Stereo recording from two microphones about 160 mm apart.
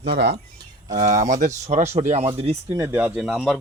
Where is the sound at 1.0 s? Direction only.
55° right (ahead or behind); by 2.6 s 35° right (ahead or behind).